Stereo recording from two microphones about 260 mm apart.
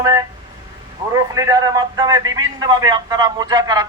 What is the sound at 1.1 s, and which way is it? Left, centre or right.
A man's voice, centre.